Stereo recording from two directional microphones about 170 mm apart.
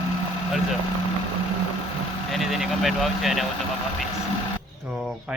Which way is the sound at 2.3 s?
Centre (ahead or behind).